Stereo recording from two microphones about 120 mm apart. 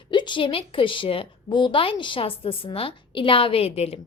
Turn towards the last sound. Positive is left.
turn(degrees=60)  # may be behind; listen again after turning